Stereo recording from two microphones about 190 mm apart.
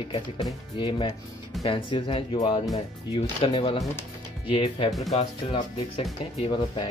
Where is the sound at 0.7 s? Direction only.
25° left (ahead or behind).